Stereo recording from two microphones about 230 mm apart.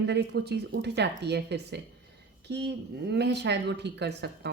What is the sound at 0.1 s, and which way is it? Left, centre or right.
Speech, right.